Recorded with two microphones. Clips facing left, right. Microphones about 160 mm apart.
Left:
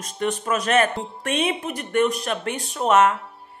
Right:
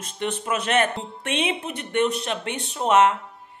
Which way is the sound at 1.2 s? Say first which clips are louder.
Left 2 dB; 40° left (ahead or behind).